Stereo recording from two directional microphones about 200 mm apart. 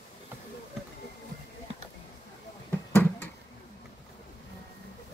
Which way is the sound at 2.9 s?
10° left (ahead or behind).